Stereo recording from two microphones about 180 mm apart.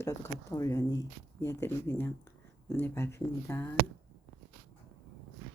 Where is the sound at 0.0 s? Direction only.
15° left (ahead or behind).